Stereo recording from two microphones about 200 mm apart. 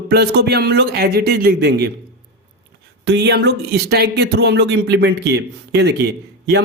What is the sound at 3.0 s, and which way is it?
Speech, 55° right (ahead or behind).